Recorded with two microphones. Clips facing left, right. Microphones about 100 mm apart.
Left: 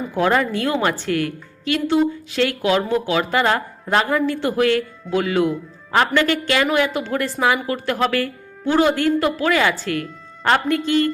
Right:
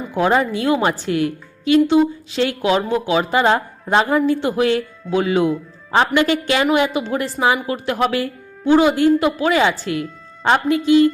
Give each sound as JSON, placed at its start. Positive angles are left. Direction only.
{"t": 0.1, "sound": "a woman's voice", "side_deg": -20}